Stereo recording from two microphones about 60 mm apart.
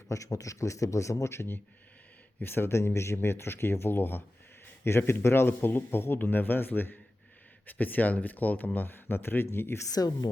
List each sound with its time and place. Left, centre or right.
0.1 s a man's voice: left
9.8 s a woman's voice: left